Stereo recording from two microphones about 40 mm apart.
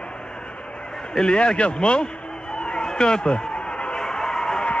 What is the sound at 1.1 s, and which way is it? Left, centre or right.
Speech, left.